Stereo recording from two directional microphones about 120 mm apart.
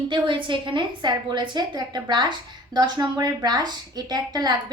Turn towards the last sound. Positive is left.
turn(degrees=-35)  # may be behind; listen again after turning